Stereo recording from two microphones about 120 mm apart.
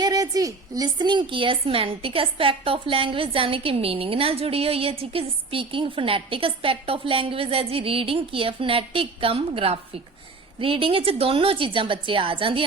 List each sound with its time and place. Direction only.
0.0 s a woman's voice: 30° right (ahead or behind); by 12.6 s 50° right (ahead or behind)